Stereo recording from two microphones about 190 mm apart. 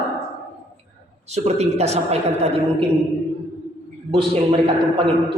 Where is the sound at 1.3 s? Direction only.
35° right (ahead or behind).